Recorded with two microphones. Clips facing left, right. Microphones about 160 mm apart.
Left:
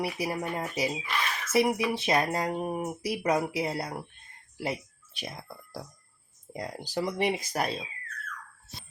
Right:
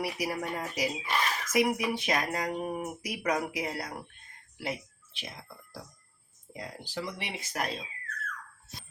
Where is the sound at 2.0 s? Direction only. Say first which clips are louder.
Left 4 dB; 30° left (ahead or behind).